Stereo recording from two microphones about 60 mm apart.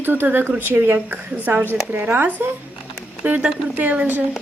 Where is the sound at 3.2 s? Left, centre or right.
Right.